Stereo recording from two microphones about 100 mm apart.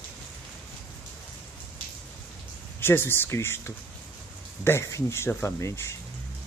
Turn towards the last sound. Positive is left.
turn(degrees=25)  # may be behind; listen again after turning